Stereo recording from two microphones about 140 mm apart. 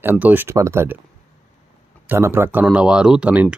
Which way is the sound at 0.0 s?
15° right (ahead or behind).